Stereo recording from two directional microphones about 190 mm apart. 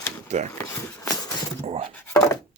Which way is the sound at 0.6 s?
15° left (ahead or behind).